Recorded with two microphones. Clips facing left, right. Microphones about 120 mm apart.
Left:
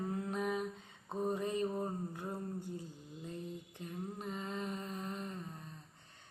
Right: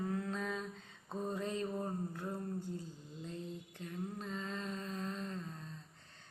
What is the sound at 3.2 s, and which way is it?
Mantra, 15° left (ahead or behind).